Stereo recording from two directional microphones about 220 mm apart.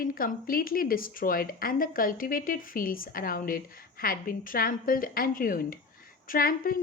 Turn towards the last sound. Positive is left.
turn(degrees=40)  # may be behind; listen again after turning